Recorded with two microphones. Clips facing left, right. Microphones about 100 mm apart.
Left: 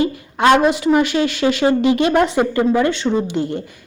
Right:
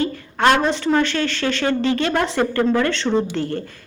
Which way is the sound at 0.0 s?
15° left (ahead or behind).